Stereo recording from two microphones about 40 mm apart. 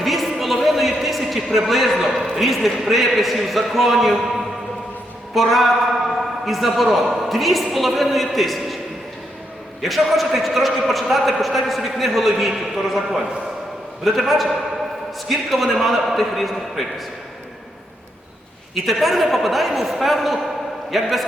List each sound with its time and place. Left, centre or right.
0.0 s a sound: centre
2.3 s a man's voice: centre
5.3 s a man's voice: centre
9.8 s a man's voice: centre
18.7 s a man's voice: centre